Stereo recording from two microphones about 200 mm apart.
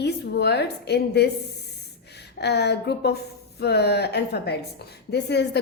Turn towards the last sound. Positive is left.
turn(degrees=55)  # may be behind; listen again after turning